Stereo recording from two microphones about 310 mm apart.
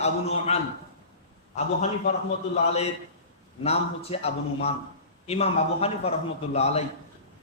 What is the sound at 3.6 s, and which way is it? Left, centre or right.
A man's voice, centre.